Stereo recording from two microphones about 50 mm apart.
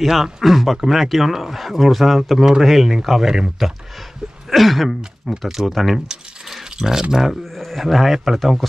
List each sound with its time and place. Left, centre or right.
0.0 s speech: centre